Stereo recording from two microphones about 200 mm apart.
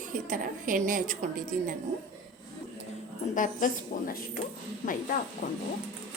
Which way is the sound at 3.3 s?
40° left (ahead or behind).